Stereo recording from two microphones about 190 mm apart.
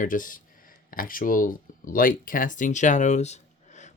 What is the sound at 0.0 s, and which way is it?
Speech, 45° left (ahead or behind).